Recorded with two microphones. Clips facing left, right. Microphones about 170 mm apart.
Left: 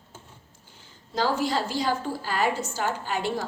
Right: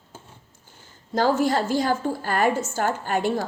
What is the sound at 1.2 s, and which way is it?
A woman's voice, 50° right (ahead or behind).